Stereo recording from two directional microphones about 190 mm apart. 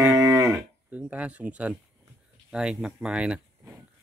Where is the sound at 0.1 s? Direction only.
15° right (ahead or behind).